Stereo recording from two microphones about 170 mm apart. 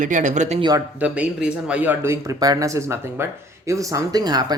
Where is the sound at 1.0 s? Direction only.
5° right (ahead or behind).